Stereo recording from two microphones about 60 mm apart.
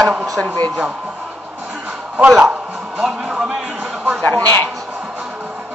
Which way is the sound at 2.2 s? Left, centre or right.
Centre.